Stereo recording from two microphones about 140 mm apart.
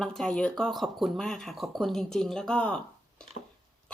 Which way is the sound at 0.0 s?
5° left (ahead or behind).